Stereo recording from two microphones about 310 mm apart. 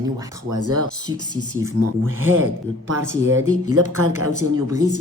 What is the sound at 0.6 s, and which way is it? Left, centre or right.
Speech, right.